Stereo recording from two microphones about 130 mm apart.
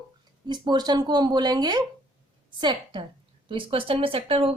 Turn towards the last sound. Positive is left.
turn(degrees=-45)  # may be behind; listen again after turning